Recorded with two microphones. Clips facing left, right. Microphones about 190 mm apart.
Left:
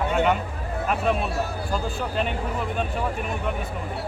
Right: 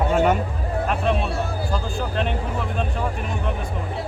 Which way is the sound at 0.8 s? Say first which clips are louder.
Even; 5° left (ahead or behind).